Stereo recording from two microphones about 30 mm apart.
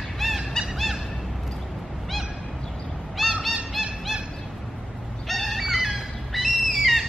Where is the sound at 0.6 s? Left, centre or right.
Centre.